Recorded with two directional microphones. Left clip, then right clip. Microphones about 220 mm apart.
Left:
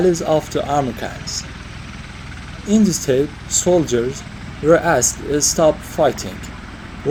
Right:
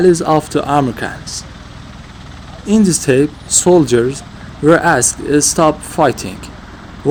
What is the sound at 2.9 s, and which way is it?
Speech, 50° right (ahead or behind).